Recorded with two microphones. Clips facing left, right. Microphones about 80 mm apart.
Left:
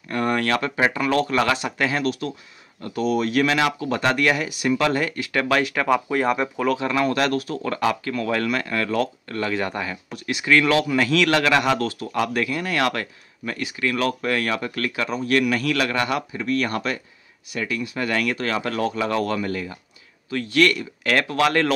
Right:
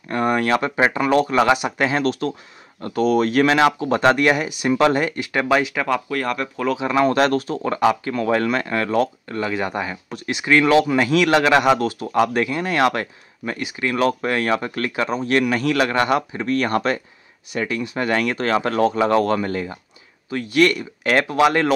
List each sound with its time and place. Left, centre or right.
0.1 s speech: right
5.9 s speech: centre
6.8 s speech: right
10.1 s speech: right
20.2 s speech: right